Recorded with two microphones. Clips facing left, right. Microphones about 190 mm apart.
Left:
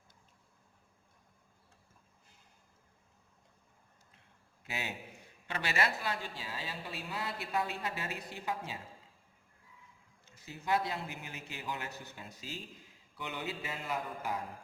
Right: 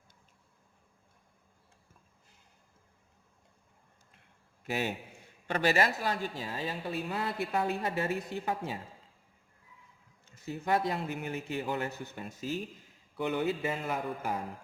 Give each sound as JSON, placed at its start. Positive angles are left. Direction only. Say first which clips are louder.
{"t": 5.5, "sound": "speech", "louder": "right 7 dB", "side_deg": -45}
{"t": 10.3, "sound": "speech", "louder": "right 3 dB", "side_deg": -55}